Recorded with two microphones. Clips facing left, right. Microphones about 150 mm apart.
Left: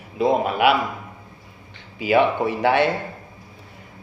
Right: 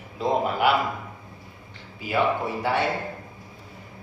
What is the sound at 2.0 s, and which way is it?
Speech, 75° left (ahead or behind).